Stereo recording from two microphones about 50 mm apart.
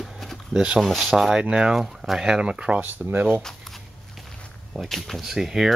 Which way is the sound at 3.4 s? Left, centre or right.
Centre.